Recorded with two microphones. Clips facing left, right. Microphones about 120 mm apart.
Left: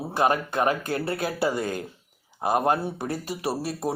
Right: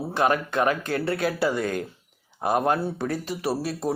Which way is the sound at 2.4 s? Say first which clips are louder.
Even; 5° left (ahead or behind).